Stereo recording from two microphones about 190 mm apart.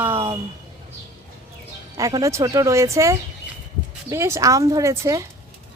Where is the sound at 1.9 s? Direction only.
20° right (ahead or behind).